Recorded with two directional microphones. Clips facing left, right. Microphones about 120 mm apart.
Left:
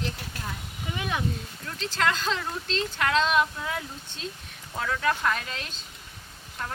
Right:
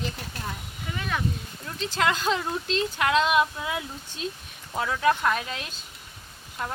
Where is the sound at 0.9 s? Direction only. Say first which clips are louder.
Even; 15° left (ahead or behind).